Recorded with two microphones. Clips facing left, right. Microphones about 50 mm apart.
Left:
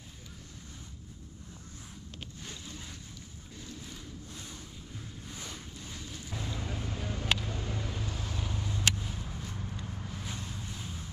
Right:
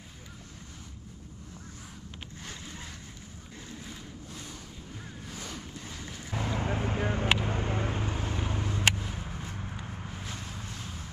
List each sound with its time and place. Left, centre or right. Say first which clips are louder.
6.0 s vehicle: right 6 dB; right